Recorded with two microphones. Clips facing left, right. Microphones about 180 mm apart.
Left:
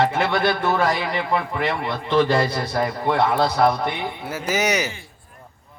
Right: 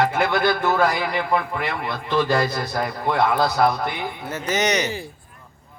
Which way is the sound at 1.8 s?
25° left (ahead or behind).